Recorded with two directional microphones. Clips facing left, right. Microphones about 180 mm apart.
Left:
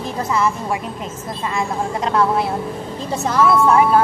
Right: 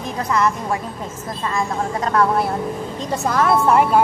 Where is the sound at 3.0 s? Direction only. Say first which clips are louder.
Left 2 dB; 5° left (ahead or behind).